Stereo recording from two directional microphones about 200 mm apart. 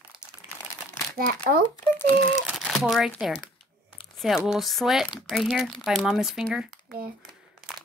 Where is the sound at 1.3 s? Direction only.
50° right (ahead or behind).